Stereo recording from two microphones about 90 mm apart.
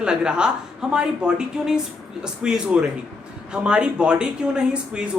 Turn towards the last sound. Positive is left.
turn(degrees=-10)  # may be behind; listen again after turning